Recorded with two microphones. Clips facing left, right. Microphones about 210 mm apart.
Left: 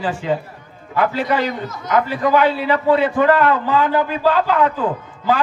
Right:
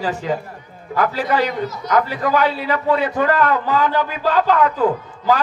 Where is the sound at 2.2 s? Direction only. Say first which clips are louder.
Left 3 dB; 40° right (ahead or behind).